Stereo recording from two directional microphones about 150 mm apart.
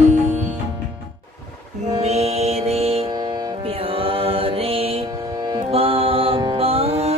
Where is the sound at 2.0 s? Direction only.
45° right (ahead or behind).